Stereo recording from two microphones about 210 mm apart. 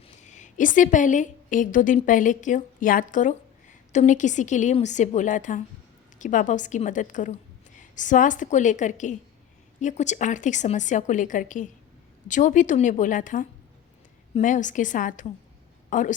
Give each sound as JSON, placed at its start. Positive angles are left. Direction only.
{"t": 0.2, "sound": "a woman's voice", "side_deg": 35}